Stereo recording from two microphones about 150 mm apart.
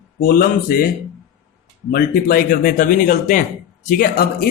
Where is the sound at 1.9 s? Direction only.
80° left; by 3.4 s 65° left (ahead or behind).